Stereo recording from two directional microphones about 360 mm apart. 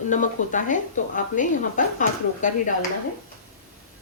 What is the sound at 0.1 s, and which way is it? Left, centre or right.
Speech, left.